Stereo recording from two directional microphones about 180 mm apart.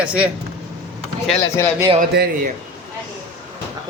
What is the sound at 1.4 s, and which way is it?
Speech, 15° left (ahead or behind).